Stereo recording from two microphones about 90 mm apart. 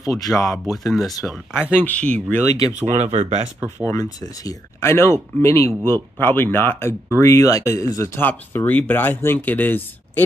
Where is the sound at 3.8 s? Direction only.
40° left (ahead or behind).